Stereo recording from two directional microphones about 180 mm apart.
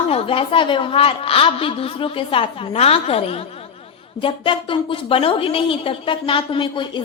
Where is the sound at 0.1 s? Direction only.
30° left (ahead or behind).